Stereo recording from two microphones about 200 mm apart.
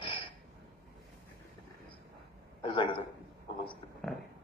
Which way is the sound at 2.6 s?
25° left (ahead or behind).